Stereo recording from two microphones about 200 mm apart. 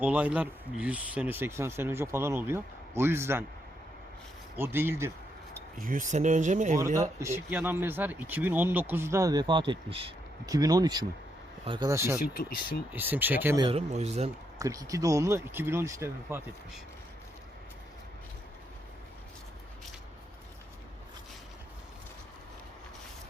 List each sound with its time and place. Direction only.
0.0 s speech: 5° right (ahead or behind)
4.5 s speech: 10° right (ahead or behind)
5.8 s speech: 40° right (ahead or behind)
7.2 s speech: 15° right (ahead or behind)
12.2 s speech: 45° left (ahead or behind)
12.9 s speech: 10° right (ahead or behind)
13.6 s speech: 30° right (ahead or behind)
14.6 s speech: 15° right (ahead or behind)